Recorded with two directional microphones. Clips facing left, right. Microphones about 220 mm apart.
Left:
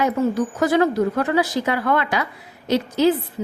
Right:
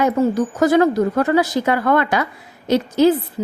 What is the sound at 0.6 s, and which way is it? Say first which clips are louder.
A woman's voice: right 4 dB; 45° right (ahead or behind).